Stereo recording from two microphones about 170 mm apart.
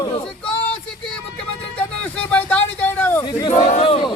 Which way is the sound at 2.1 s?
10° left (ahead or behind).